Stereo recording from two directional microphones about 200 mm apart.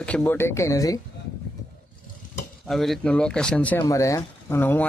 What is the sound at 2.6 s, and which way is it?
Speech, centre (ahead or behind).